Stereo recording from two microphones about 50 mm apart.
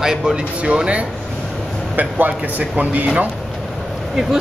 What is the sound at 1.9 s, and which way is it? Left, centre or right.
A man's voice, right.